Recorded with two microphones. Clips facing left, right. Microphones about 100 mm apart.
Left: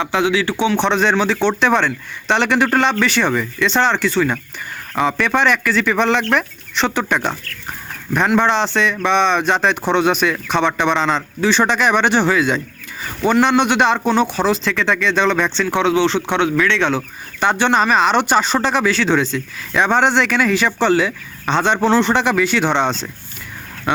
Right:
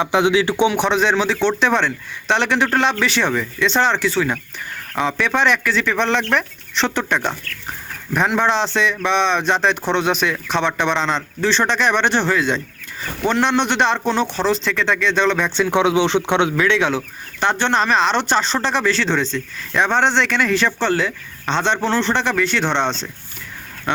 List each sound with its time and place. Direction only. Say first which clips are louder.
0.0 s speech: right 1 dB; 20° right (ahead or behind)
0.9 s a man's voice: left 1 dB; centre (ahead or behind)
15.6 s speech: right 1 dB; 15° right (ahead or behind)
16.6 s a man's voice: left 1 dB; 5° right (ahead or behind)
17.4 s speech: left 2 dB; 5° left (ahead or behind)